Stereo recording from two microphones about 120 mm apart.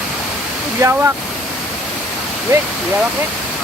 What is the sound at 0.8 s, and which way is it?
Speech, 20° right (ahead or behind).